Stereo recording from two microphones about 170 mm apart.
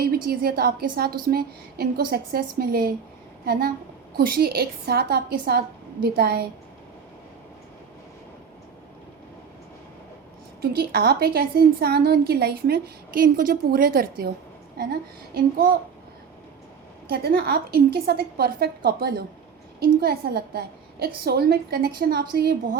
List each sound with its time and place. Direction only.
0.0 s a woman's voice: 60° right (ahead or behind)
10.6 s a woman's voice: 65° right (ahead or behind)
15.4 s a woman's voice: 55° right (ahead or behind)
17.1 s a woman's voice: 65° right (ahead or behind)